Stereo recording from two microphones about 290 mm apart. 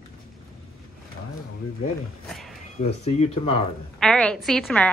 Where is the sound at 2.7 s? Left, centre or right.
Left.